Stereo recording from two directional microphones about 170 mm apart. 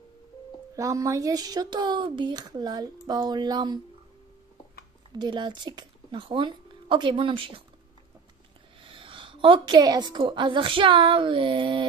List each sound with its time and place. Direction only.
0.7 s speech: 20° right (ahead or behind)
5.2 s speech: 25° right (ahead or behind)
8.8 s a woman's voice: 30° right (ahead or behind)